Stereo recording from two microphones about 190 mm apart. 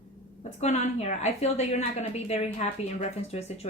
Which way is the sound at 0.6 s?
35° left (ahead or behind).